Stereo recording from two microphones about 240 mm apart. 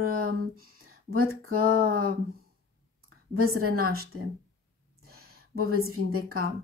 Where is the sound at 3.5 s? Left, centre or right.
Right.